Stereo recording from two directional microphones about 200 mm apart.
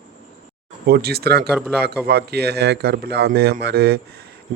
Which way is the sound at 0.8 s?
50° right (ahead or behind).